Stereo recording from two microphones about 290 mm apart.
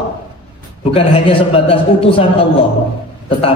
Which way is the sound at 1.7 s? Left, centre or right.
Centre.